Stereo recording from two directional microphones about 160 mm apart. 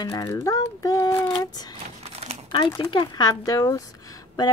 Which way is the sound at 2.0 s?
40° right (ahead or behind).